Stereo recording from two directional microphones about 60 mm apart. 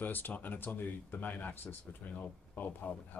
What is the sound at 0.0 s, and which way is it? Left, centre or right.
Speech, left.